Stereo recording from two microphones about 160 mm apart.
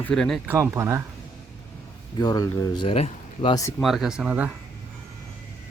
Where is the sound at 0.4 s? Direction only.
15° right (ahead or behind).